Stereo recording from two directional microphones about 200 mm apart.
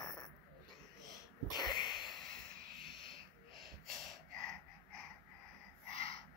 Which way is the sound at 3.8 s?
Centre (ahead or behind).